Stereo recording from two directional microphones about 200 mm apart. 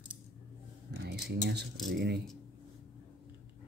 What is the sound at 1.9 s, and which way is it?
Speech, 55° right (ahead or behind).